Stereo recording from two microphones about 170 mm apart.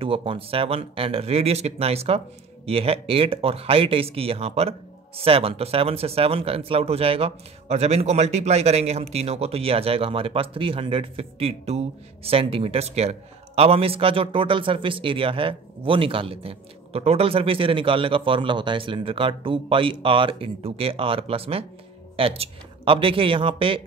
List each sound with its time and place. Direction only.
0.0 s speech: 30° right (ahead or behind)